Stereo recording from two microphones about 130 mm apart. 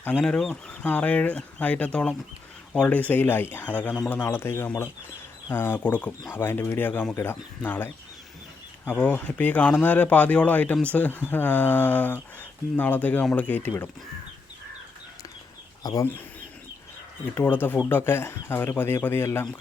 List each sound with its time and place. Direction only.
0.0 s speech: 15° left (ahead or behind)
15.8 s speech: 30° left (ahead or behind)
17.3 s speech: 15° left (ahead or behind)